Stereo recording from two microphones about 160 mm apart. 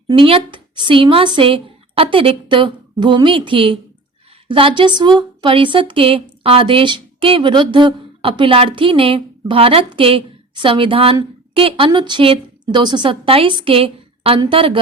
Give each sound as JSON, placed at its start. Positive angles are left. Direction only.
{"t": 0.1, "sound": "speech", "side_deg": -35}